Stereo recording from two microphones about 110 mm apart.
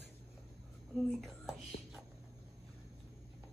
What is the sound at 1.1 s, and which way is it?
Whispering, centre (ahead or behind).